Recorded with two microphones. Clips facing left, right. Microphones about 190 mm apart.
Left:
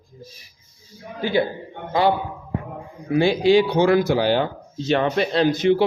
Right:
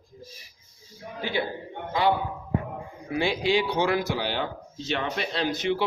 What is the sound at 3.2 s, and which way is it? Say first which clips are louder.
A man's voice: left 8 dB; 40° left (ahead or behind).